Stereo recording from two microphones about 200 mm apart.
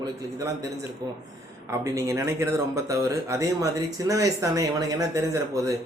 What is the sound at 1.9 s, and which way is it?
A man's voice, 15° right (ahead or behind).